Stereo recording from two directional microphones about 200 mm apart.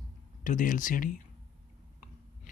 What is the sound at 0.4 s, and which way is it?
Speech, 40° left (ahead or behind).